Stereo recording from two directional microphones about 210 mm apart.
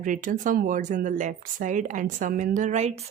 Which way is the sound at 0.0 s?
40° right (ahead or behind).